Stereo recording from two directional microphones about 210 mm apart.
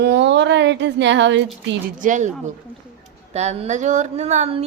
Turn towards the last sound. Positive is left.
turn(degrees=-30)  # may be behind; listen again after turning